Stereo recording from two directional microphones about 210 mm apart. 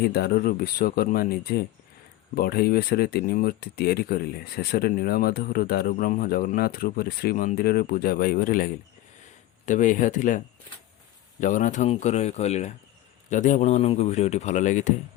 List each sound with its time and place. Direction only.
0.0 s speech: 45° left (ahead or behind)